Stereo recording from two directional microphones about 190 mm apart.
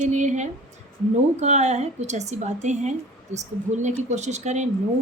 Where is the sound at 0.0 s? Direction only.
40° right (ahead or behind).